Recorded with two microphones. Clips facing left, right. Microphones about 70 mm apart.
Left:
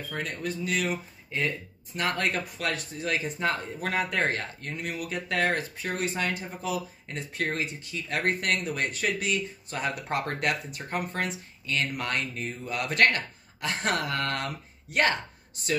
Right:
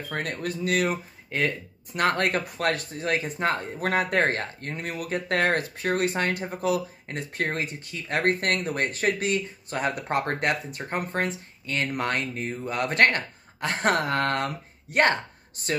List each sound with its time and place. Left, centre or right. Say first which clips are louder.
0.1 s speech: right 3 dB; right